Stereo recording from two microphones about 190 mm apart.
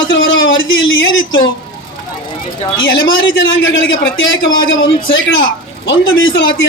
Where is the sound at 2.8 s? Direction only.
85° left.